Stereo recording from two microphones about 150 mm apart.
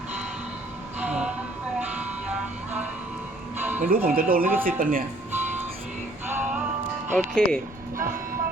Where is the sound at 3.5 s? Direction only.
15° right (ahead or behind).